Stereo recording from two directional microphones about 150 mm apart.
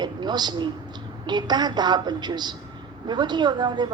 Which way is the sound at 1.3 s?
30° right (ahead or behind).